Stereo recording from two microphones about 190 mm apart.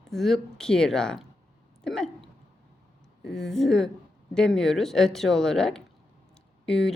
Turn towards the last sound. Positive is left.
turn(degrees=0)  # may be behind; listen again after turning